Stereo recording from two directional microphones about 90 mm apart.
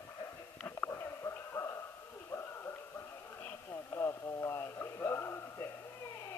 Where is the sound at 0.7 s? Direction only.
30° left (ahead or behind).